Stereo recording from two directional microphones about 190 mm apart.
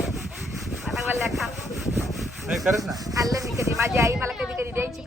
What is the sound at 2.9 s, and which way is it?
Speech, 20° right (ahead or behind).